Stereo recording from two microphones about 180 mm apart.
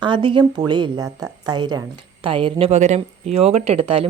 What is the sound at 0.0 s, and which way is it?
Speech, 25° right (ahead or behind).